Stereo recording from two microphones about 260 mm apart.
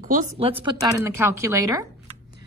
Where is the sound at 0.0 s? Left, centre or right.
Right; by 1.9 s centre.